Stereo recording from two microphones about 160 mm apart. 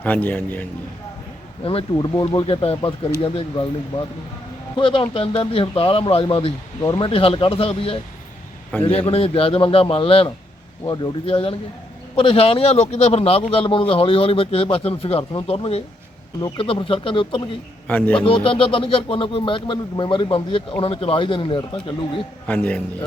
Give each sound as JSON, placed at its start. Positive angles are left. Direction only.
{"t": 0.0, "sound": "a man's voice", "side_deg": 10}
{"t": 1.6, "sound": "a man's voice", "side_deg": 35}
{"t": 17.8, "sound": "a man's voice", "side_deg": 10}
{"t": 18.3, "sound": "a man's voice", "side_deg": 35}
{"t": 22.4, "sound": "a man's voice", "side_deg": 10}